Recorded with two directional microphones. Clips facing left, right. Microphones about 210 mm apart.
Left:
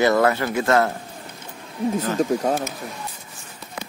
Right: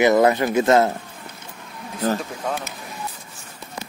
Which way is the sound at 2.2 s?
40° left (ahead or behind).